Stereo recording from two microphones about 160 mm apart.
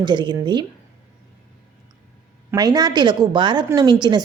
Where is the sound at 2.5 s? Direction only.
25° right (ahead or behind).